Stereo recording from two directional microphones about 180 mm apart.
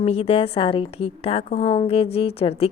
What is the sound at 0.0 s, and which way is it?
A woman's voice, 35° left (ahead or behind).